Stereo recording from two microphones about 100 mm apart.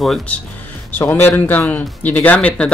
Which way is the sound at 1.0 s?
20° left (ahead or behind).